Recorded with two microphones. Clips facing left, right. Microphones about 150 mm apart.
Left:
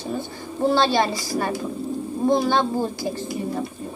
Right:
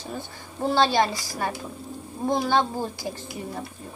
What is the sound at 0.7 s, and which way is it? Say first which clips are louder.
Speech: left 1 dB; 15° right (ahead or behind).